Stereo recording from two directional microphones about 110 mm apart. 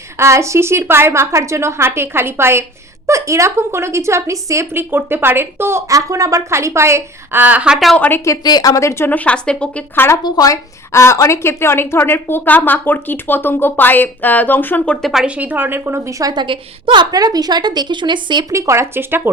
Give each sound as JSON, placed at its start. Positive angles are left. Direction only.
{"t": 0.2, "sound": "a woman's voice", "side_deg": -25}
{"t": 7.9, "sound": "speech", "side_deg": 15}
{"t": 8.2, "sound": "a woman's voice", "side_deg": 35}
{"t": 10.2, "sound": "a woman's voice", "side_deg": 35}
{"t": 15.0, "sound": "a woman's voice", "side_deg": -5}
{"t": 15.4, "sound": "a woman's voice", "side_deg": -15}
{"t": 18.5, "sound": "a woman's voice", "side_deg": -25}